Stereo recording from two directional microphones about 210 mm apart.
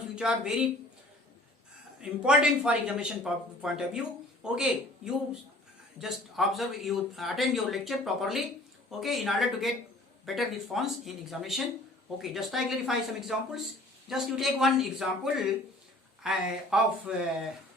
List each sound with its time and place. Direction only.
0.2 s speech: 5° right (ahead or behind)
2.0 s speech: 5° right (ahead or behind)
6.0 s speech: centre (ahead or behind)